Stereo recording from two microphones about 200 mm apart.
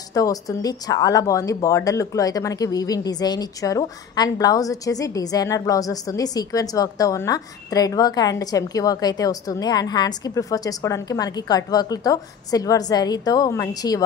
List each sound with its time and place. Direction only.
0.1 s speech: 15° left (ahead or behind)